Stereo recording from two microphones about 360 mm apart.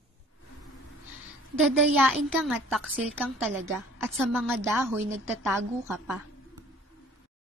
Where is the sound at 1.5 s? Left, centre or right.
Centre.